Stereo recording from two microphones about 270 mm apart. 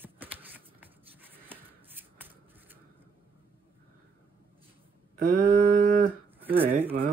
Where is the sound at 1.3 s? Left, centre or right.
Centre.